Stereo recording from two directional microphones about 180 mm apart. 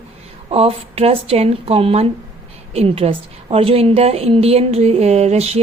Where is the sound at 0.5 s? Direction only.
35° right (ahead or behind).